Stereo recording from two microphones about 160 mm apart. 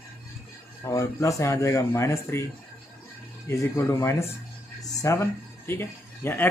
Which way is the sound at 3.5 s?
15° left (ahead or behind).